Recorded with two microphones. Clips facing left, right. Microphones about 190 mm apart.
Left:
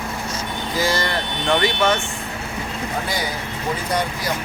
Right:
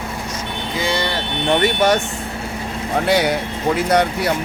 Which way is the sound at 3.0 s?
70° right (ahead or behind).